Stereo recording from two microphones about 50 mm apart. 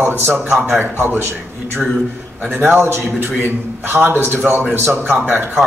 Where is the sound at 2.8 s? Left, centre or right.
Right.